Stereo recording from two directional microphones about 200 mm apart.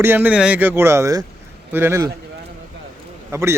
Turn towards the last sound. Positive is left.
turn(degrees=-15)  # may be behind; listen again after turning